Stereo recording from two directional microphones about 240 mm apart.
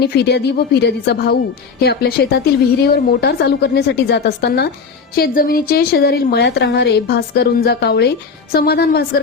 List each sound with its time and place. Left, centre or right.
0.0 s a woman's voice: left